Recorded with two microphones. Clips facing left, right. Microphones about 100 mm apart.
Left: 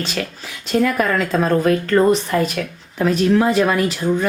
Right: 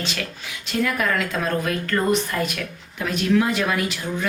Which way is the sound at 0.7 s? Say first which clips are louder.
Left 6 dB; 40° left (ahead or behind).